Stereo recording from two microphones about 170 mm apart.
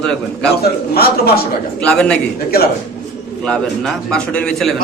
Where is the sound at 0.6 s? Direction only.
65° left (ahead or behind).